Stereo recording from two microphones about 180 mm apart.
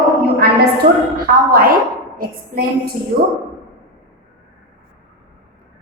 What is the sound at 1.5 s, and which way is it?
A woman's voice, 55° right (ahead or behind).